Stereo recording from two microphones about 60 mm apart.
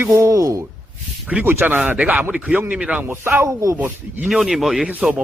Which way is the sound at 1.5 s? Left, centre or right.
Right.